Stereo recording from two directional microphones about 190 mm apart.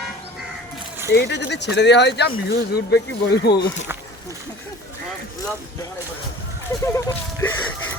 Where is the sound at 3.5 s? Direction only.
60° left (ahead or behind).